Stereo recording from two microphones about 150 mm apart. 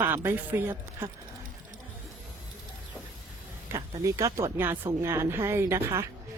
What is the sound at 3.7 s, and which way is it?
Speech, 20° right (ahead or behind).